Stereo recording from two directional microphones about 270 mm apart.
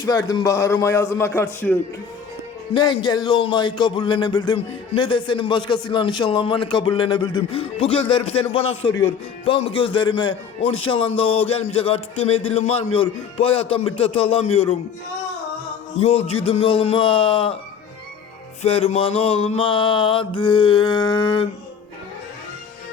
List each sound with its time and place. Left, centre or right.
0.0 s speech: centre
9.4 s mantra: left
16.0 s mantra: left
18.6 s mantra: left